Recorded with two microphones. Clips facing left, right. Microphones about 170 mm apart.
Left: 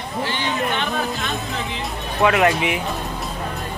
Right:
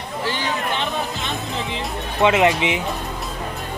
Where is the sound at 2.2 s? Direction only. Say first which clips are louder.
Right 1 dB; 20° right (ahead or behind).